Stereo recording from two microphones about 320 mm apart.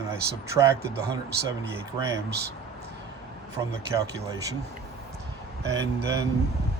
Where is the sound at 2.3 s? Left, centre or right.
Right.